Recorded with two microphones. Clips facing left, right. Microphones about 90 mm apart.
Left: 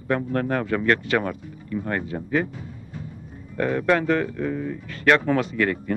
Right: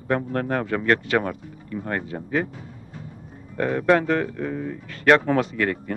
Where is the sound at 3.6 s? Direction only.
30° right (ahead or behind).